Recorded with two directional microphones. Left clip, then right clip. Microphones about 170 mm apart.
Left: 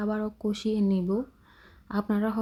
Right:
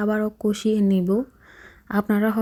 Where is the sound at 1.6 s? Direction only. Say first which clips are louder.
Right 7 dB; 30° right (ahead or behind).